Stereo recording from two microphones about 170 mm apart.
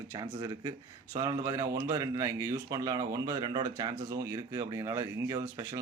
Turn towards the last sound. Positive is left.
turn(degrees=-20)  # may be behind; listen again after turning